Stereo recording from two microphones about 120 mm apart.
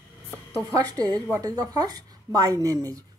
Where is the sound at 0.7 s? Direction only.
30° right (ahead or behind).